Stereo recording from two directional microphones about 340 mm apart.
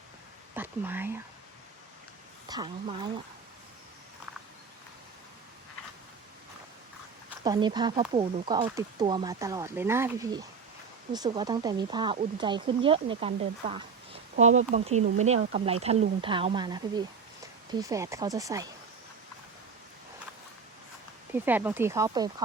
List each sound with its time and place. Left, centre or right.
0.5 s speech: centre
2.5 s speech: centre
7.4 s speech: centre
21.3 s speech: centre